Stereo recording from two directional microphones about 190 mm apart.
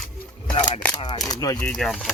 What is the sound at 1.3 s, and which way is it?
Speech, 20° left (ahead or behind).